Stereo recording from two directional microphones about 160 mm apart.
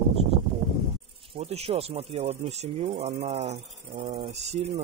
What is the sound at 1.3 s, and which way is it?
Speech, 40° right (ahead or behind).